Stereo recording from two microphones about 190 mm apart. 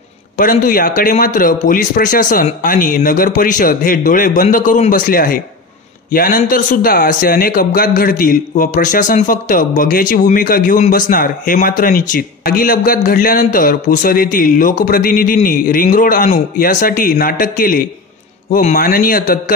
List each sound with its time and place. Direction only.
0.4 s a man's voice: 45° left (ahead or behind)